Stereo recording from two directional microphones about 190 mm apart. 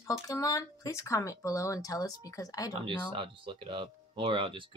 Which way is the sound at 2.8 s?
25° right (ahead or behind).